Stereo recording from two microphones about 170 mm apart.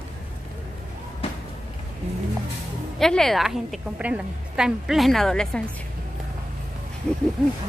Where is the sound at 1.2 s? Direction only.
35° left (ahead or behind).